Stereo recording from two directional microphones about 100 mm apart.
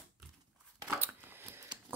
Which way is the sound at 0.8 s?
25° right (ahead or behind).